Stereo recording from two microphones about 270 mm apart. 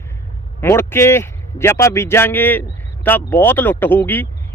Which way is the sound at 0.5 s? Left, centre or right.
Centre.